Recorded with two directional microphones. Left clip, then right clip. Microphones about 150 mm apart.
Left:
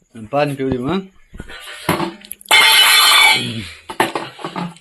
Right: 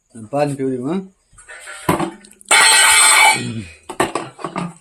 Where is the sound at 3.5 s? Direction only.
25° right (ahead or behind).